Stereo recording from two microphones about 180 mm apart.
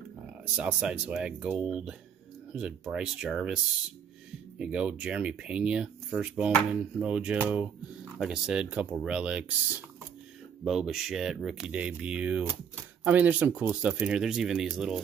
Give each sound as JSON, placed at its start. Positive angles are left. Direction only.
{"t": 0.6, "sound": "speech", "side_deg": -5}